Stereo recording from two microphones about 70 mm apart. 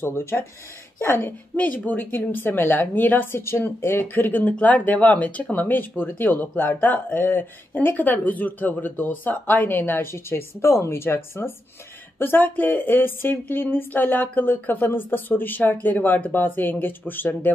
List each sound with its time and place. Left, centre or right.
0.0 s speech: left